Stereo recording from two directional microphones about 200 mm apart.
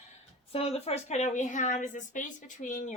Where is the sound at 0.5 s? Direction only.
30° left (ahead or behind).